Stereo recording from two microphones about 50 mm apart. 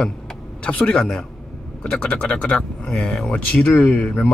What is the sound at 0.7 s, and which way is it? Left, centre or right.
Speech, centre.